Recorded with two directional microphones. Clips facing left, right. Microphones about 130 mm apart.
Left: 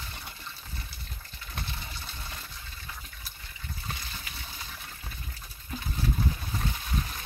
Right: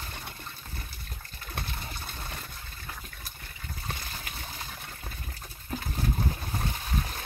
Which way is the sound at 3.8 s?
45° right (ahead or behind).